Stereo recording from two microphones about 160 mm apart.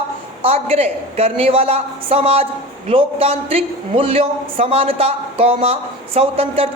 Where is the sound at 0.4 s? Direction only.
40° right (ahead or behind).